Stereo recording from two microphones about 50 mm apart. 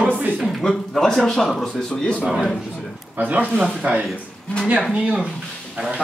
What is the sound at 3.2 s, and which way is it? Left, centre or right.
Speech, right.